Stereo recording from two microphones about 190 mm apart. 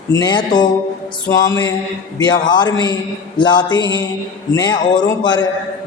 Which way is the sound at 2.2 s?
20° left (ahead or behind).